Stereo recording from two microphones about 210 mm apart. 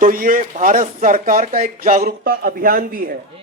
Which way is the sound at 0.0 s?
40° right (ahead or behind).